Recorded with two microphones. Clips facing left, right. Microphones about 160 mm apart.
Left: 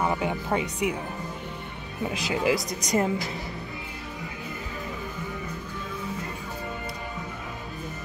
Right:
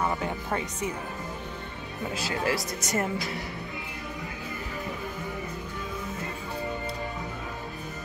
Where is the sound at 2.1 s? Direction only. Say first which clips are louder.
Left 4 dB; 15° left (ahead or behind).